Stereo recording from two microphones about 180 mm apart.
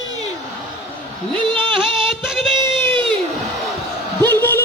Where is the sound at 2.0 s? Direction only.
5° right (ahead or behind).